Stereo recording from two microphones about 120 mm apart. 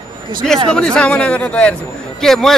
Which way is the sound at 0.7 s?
5° left (ahead or behind).